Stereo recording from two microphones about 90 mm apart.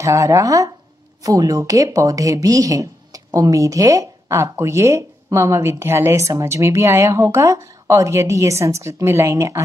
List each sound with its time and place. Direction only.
0.0 s speech: 35° right (ahead or behind)